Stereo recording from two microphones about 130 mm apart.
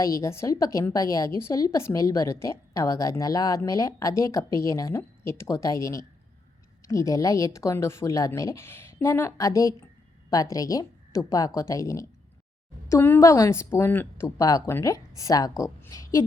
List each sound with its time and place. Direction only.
0.0 s a woman's voice: 25° left (ahead or behind)